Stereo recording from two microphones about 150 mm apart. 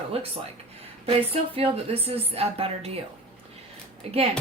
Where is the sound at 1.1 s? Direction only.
40° right (ahead or behind).